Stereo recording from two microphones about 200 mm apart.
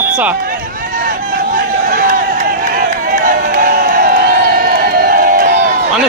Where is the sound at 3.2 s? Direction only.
45° right (ahead or behind).